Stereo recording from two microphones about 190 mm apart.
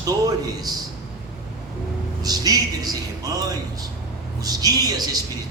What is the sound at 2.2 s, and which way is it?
Speech, 20° right (ahead or behind).